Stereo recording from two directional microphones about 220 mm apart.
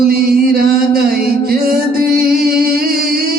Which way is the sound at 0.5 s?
45° right (ahead or behind).